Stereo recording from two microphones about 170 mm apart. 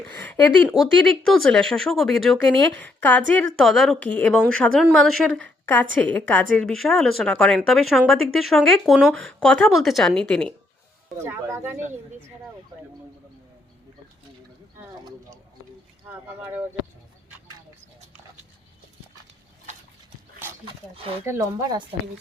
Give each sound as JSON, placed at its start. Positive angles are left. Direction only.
{"t": 0.2, "sound": "a woman's voice", "side_deg": 10}
{"t": 11.2, "sound": "speech", "side_deg": -15}
{"t": 16.0, "sound": "speech", "side_deg": -10}
{"t": 21.2, "sound": "speech", "side_deg": -20}